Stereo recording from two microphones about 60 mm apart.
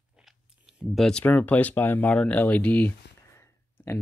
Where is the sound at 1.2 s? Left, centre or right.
Left.